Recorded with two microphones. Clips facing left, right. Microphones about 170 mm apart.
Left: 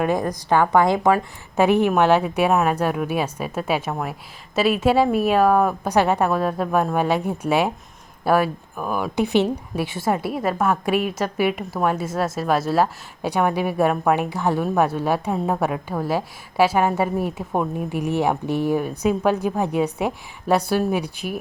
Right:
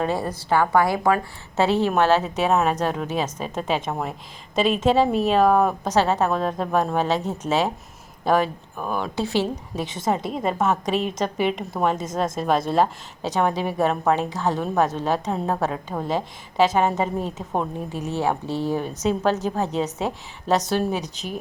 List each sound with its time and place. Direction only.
0.0 s a woman's voice: 15° left (ahead or behind)